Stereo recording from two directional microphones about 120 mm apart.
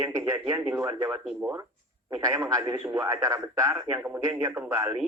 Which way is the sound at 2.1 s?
20° right (ahead or behind).